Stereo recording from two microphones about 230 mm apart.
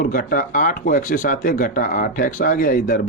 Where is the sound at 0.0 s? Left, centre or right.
Left.